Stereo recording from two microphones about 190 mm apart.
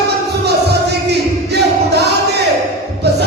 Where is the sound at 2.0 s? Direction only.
60° right (ahead or behind).